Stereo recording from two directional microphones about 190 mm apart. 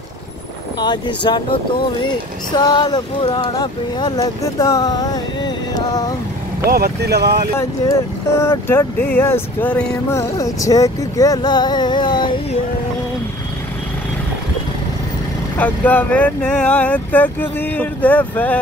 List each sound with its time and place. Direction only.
0.7 s speech: 25° left (ahead or behind)
6.6 s speech: 55° right (ahead or behind)
7.5 s speech: 15° left (ahead or behind)
15.5 s speech: 10° left (ahead or behind)